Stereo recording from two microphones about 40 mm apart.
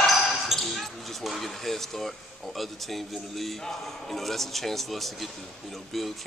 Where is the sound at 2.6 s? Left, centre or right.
Centre.